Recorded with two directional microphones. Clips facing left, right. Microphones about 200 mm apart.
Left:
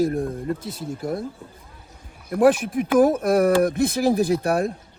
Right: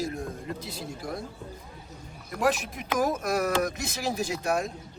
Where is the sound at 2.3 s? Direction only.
55° left (ahead or behind).